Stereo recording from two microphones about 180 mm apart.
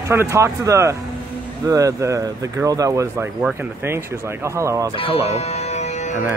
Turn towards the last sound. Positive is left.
turn(degrees=40)  # may be behind; listen again after turning